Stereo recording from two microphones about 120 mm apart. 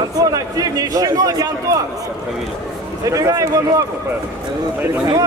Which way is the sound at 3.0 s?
25° right (ahead or behind).